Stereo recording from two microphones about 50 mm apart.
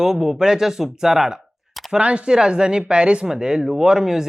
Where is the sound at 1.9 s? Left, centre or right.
Right.